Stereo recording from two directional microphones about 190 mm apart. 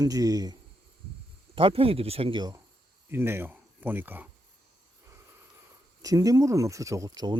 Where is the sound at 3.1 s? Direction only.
10° right (ahead or behind).